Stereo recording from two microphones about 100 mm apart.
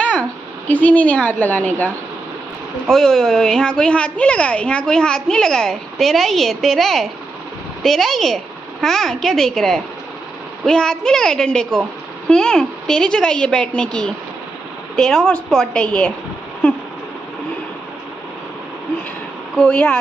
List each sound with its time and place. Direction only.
0.7 s a woman's voice: 15° left (ahead or behind)
2.9 s a woman's voice: 5° left (ahead or behind)
19.5 s a woman's voice: 10° left (ahead or behind)